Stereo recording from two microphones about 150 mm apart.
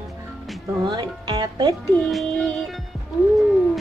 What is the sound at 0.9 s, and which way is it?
Speech, 30° right (ahead or behind).